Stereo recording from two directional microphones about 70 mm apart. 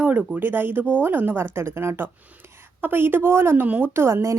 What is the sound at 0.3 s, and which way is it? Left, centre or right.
A woman's voice, right.